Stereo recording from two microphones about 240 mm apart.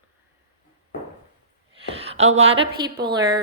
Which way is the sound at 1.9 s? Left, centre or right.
Right.